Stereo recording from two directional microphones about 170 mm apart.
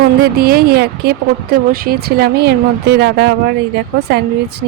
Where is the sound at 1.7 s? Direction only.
60° right (ahead or behind); by 3.3 s 75° right (ahead or behind).